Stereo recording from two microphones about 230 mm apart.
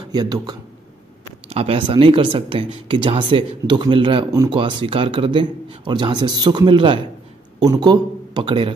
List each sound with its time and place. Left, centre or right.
0.1 s speech: centre